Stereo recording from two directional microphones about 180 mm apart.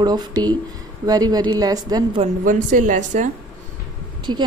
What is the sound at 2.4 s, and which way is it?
Speech, 45° right (ahead or behind).